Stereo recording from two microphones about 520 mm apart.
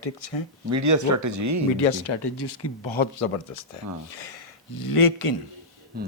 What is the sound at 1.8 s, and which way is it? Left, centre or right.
Speech, left.